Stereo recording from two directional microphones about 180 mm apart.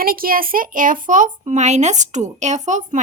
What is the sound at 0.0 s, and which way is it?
A child's voice, 55° right (ahead or behind).